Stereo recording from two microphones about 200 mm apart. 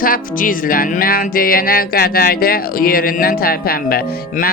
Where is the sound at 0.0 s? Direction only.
45° left (ahead or behind).